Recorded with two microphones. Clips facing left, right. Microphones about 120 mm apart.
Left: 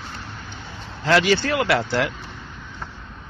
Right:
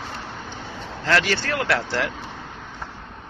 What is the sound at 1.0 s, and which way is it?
Speech, 10° left (ahead or behind).